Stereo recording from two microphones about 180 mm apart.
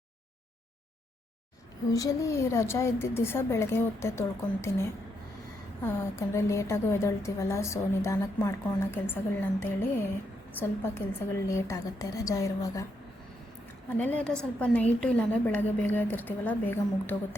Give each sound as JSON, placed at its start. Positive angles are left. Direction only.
{"t": 1.9, "sound": "a woman's voice", "side_deg": 20}
{"t": 13.9, "sound": "a woman's voice", "side_deg": 10}